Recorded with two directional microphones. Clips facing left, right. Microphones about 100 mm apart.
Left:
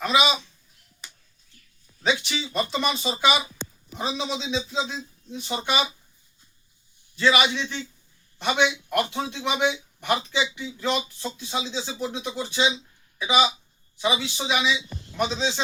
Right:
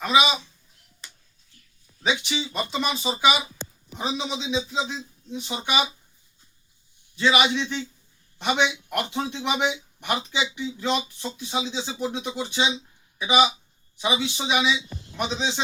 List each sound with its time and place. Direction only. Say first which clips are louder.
0.0 s speech: right 1 dB; 15° right (ahead or behind)
2.2 s speech: left 1 dB; 15° right (ahead or behind)
7.2 s speech: even; 15° right (ahead or behind)